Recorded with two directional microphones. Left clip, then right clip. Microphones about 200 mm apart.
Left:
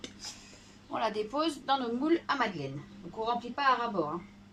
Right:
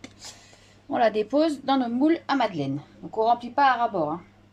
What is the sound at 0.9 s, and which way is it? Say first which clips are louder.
Speech: right 10 dB; 40° right (ahead or behind).